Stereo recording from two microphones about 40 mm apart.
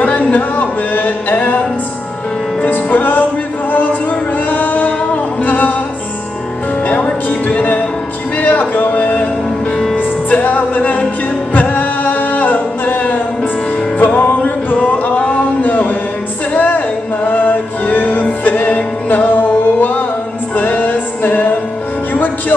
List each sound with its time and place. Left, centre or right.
0.0 s music: left
2.6 s music: left
4.5 s music: left
6.9 s music: left
8.4 s a sound: left
9.9 s music: left
16.5 s a sound: left
17.3 s music: left